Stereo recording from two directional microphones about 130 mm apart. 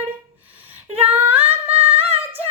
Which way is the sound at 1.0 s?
15° right (ahead or behind).